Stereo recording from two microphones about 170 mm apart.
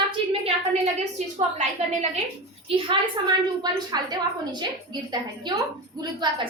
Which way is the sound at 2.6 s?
30° right (ahead or behind).